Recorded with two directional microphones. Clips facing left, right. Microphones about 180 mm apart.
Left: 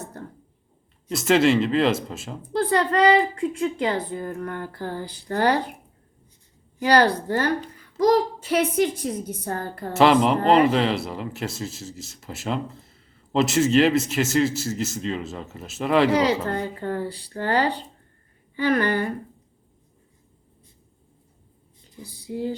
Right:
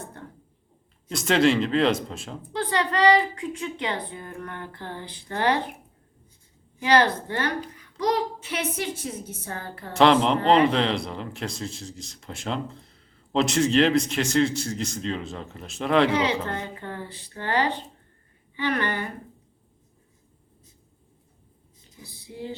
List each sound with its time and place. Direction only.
1.1 s speech: centre (ahead or behind)
2.5 s speech: 40° left (ahead or behind)
6.7 s speech: 40° left (ahead or behind)
8.4 s a woman's voice: 55° left (ahead or behind)
9.9 s speech: 5° left (ahead or behind)
16.1 s speech: 40° left (ahead or behind)
22.0 s a woman's voice: 45° left (ahead or behind)